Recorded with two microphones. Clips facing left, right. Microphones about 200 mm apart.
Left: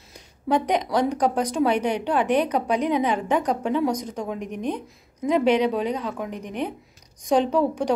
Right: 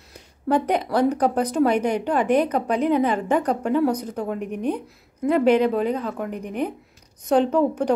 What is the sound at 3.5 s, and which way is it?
A woman's voice, 5° right (ahead or behind).